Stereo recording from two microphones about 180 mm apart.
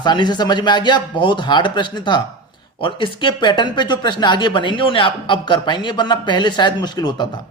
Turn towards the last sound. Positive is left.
turn(degrees=25)  # may be behind; listen again after turning